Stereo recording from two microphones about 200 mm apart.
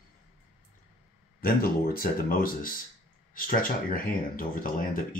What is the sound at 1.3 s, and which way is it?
Speech, 45° left (ahead or behind).